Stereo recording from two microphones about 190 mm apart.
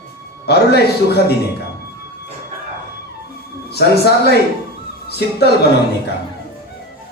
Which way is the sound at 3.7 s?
60° left (ahead or behind).